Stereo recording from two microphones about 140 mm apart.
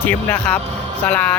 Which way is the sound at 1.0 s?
10° left (ahead or behind).